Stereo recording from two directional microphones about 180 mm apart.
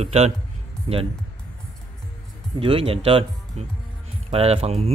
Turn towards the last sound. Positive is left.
turn(degrees=-35)  # may be behind; listen again after turning